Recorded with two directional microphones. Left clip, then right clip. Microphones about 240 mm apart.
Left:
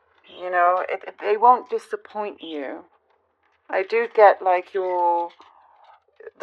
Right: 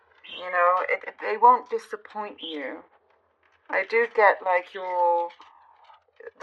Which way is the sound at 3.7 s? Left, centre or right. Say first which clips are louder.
Left 1 dB; left.